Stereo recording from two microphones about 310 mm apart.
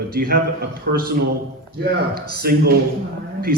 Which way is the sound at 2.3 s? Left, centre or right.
Right.